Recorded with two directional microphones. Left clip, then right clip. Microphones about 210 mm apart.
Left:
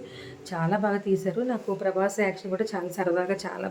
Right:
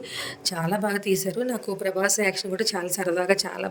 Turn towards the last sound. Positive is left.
turn(degrees=-45)  # may be behind; listen again after turning